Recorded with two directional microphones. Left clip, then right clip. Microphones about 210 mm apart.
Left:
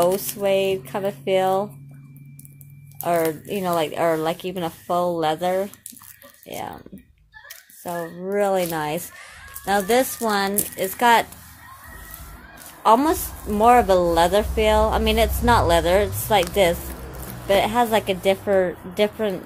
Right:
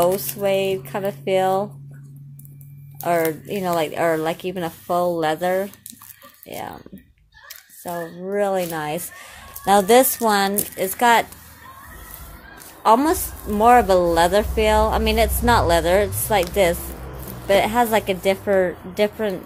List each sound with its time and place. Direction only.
0.1 s a woman's voice: centre (ahead or behind)
3.0 s a woman's voice: 5° right (ahead or behind)
9.2 s speech: 15° right (ahead or behind)
10.5 s a woman's voice: centre (ahead or behind)
12.8 s a woman's voice: 5° right (ahead or behind)
17.5 s a woman's voice: 5° right (ahead or behind)